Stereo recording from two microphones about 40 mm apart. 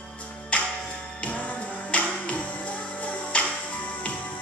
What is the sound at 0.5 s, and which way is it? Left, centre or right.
Music, left.